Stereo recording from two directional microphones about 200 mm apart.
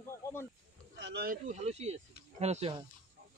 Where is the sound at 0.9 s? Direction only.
55° right (ahead or behind).